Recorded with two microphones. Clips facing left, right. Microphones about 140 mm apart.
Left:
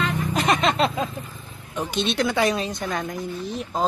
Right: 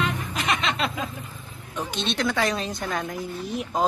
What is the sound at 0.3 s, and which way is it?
Music, 40° left (ahead or behind).